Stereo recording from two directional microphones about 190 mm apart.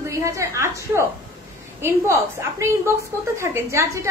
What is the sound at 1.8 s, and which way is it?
A woman's voice, 15° right (ahead or behind).